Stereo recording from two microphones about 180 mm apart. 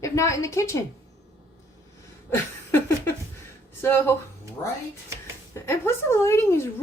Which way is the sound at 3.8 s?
15° left (ahead or behind).